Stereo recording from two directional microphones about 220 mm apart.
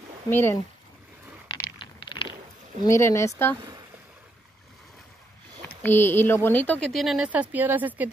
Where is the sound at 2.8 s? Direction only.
10° left (ahead or behind).